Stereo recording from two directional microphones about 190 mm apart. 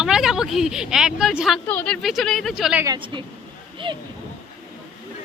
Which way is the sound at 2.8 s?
25° right (ahead or behind).